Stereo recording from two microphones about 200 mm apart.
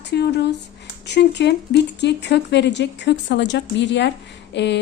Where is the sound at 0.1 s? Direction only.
55° left (ahead or behind).